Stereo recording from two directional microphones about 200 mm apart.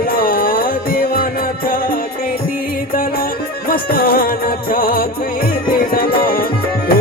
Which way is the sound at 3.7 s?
45° left (ahead or behind).